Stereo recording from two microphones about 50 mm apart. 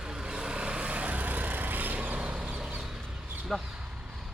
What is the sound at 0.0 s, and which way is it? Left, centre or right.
Vehicle, centre.